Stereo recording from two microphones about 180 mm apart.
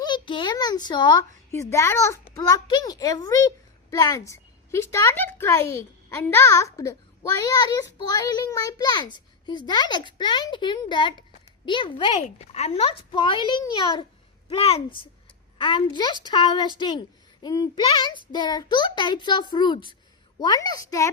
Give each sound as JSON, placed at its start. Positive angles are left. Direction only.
{"t": 0.0, "sound": "a child's voice", "side_deg": 25}